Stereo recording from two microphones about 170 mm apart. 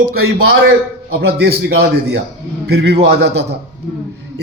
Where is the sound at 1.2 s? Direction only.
75° right (ahead or behind).